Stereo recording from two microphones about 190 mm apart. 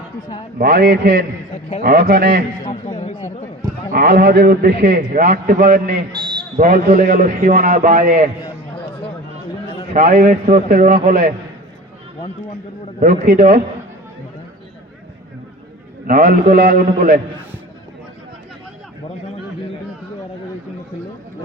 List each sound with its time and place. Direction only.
0.6 s a man's voice: 55° right (ahead or behind)
2.6 s speech: 40° left (ahead or behind)
3.9 s a man's voice: 55° right (ahead or behind)
6.1 s a sound: 25° right (ahead or behind)
6.6 s a man's voice: 50° right (ahead or behind)
9.9 s a man's voice: 45° right (ahead or behind)
13.0 s a man's voice: 45° right (ahead or behind)
16.0 s a man's voice: 45° right (ahead or behind)